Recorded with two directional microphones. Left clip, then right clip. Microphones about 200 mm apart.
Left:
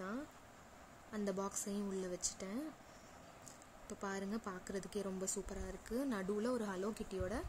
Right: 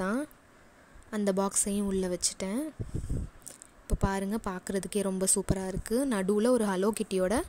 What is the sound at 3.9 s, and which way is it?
A woman's voice, 45° right (ahead or behind).